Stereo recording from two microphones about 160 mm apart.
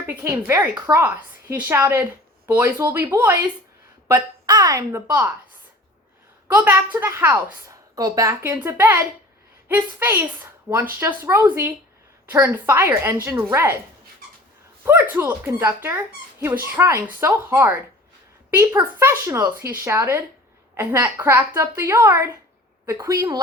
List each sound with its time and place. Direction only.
0.0 s a woman's voice: 15° right (ahead or behind)
6.5 s a woman's voice: 10° right (ahead or behind)
14.8 s a woman's voice: 15° right (ahead or behind)